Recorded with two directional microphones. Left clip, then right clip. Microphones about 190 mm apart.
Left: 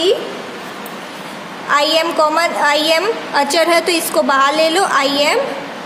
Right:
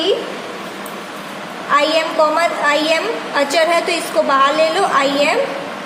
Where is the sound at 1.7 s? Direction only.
25° left (ahead or behind).